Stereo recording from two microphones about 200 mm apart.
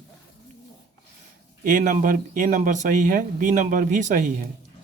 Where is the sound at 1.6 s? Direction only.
40° right (ahead or behind).